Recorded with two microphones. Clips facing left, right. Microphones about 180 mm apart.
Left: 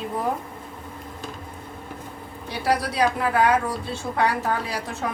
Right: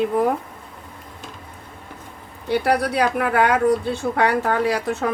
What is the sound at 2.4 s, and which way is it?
Speech, 65° right (ahead or behind).